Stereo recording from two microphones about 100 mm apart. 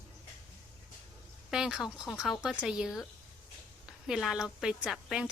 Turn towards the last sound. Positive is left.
turn(degrees=-5)  # may be behind; listen again after turning